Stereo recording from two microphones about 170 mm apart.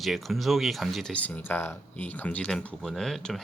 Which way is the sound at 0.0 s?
Centre (ahead or behind).